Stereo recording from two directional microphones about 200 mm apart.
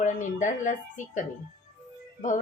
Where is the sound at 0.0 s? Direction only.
40° left (ahead or behind).